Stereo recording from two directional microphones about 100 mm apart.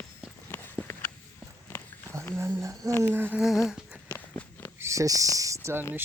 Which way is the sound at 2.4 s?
25° right (ahead or behind).